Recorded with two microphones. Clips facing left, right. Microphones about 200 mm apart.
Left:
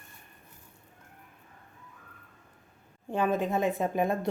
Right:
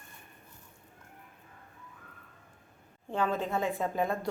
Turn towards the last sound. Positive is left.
turn(degrees=20)  # may be behind; listen again after turning